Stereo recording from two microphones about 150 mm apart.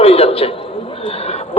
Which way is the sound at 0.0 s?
40° left (ahead or behind).